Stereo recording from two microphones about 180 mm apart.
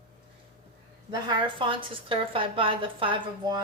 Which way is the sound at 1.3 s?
30° right (ahead or behind).